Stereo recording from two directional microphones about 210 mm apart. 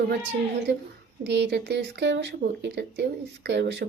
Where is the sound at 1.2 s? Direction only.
55° right (ahead or behind).